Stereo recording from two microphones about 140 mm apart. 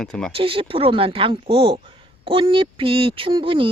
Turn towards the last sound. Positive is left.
turn(degrees=-40)  # may be behind; listen again after turning